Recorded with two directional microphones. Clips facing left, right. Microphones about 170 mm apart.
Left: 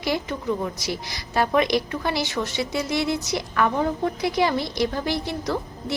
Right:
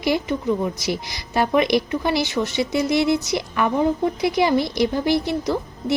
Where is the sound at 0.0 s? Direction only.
15° right (ahead or behind).